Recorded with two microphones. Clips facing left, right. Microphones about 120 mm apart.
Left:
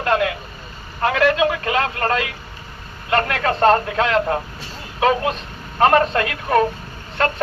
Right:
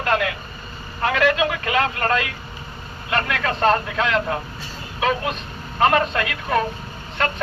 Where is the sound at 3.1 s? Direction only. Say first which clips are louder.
Left 4 dB; 45° left (ahead or behind).